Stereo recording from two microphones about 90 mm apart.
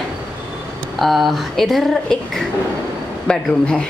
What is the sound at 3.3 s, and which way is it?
Speech, 10° left (ahead or behind).